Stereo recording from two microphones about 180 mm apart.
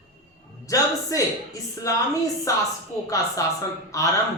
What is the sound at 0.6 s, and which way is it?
A woman's voice, 20° left (ahead or behind).